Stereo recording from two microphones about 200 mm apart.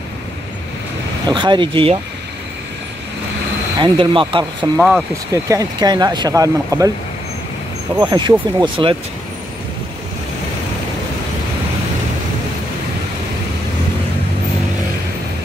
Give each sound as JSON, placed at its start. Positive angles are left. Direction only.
{"t": 1.2, "sound": "speech", "side_deg": -20}
{"t": 3.8, "sound": "speech", "side_deg": -25}
{"t": 4.7, "sound": "speech", "side_deg": -5}
{"t": 5.3, "sound": "speech", "side_deg": -15}
{"t": 7.9, "sound": "speech", "side_deg": -20}